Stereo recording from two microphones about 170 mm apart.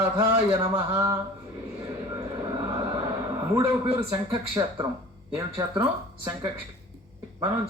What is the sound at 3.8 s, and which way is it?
Speech, 30° right (ahead or behind).